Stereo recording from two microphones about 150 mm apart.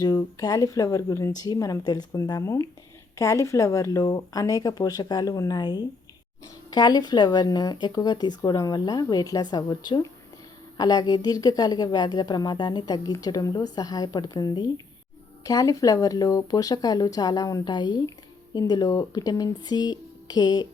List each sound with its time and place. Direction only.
0.0 s speech: 25° left (ahead or behind)